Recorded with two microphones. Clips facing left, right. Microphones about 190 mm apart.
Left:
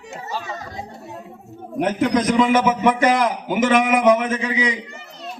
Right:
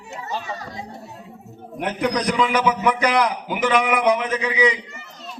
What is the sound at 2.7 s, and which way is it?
Speech, 25° left (ahead or behind).